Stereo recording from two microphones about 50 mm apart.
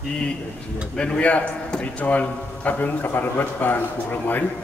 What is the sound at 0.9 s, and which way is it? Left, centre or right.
A man's voice, left.